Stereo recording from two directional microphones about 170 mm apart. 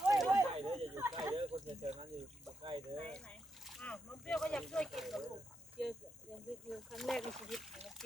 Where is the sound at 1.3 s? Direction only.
35° right (ahead or behind).